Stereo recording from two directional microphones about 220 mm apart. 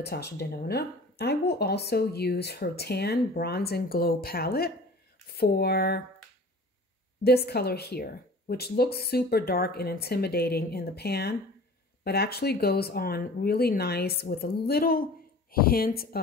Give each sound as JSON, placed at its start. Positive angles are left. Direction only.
{"t": 0.0, "sound": "speech", "side_deg": 50}
{"t": 7.2, "sound": "a woman's voice", "side_deg": 45}